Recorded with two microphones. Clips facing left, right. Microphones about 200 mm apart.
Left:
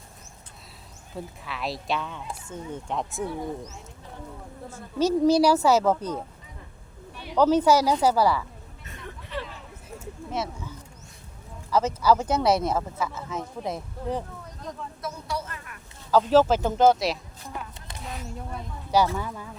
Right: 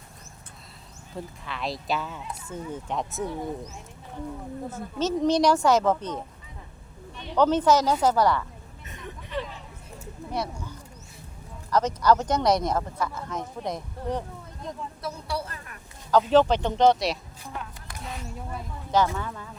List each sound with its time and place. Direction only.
1.1 s speech: centre (ahead or behind)
4.7 s a woman's voice: 10° left (ahead or behind)
7.2 s a woman's voice: 10° left (ahead or behind)
8.9 s vehicle: 20° right (ahead or behind)
10.3 s wild animals: centre (ahead or behind)
11.7 s speech: 5° left (ahead or behind)
15.0 s a sound: 30° right (ahead or behind)
16.1 s a woman's voice: 5° left (ahead or behind)
18.9 s a woman's voice: 10° left (ahead or behind)